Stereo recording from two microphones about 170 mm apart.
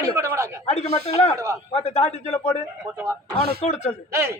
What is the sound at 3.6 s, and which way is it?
Speech, 40° left (ahead or behind).